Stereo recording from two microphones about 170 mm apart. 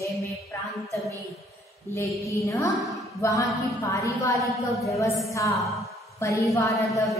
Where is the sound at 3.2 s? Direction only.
20° left (ahead or behind).